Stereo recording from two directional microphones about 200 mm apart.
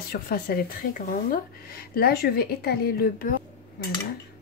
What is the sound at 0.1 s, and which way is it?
Speech, 50° left (ahead or behind).